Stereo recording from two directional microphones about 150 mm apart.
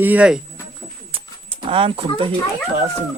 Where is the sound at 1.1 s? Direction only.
40° right (ahead or behind).